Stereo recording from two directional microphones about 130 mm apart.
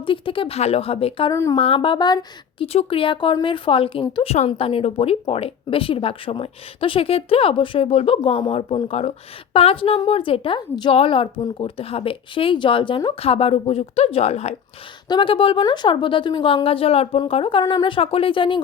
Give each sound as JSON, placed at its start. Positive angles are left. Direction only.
{"t": 0.0, "sound": "speech", "side_deg": 40}
{"t": 1.3, "sound": "speech", "side_deg": 25}
{"t": 1.5, "sound": "speech", "side_deg": 45}
{"t": 2.7, "sound": "speech", "side_deg": 45}
{"t": 15.0, "sound": "speech", "side_deg": 35}